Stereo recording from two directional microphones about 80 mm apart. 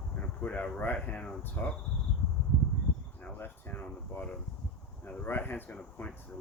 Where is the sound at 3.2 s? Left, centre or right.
Left.